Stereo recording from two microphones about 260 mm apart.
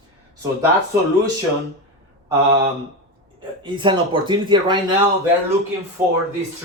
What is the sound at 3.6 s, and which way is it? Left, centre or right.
Speech, centre.